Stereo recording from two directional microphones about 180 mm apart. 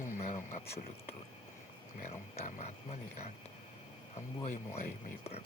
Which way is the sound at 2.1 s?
40° left (ahead or behind).